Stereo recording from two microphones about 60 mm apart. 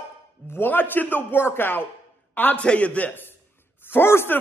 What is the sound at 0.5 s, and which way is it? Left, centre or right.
A man's voice, left.